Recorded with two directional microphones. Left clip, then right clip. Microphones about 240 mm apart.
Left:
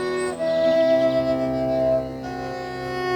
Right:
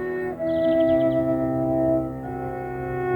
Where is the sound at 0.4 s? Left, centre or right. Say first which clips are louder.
Left 2 dB; left.